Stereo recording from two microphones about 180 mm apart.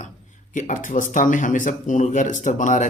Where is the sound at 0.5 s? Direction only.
45° left (ahead or behind).